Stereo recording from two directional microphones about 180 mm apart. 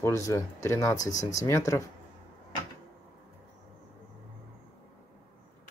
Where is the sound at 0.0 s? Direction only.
15° left (ahead or behind).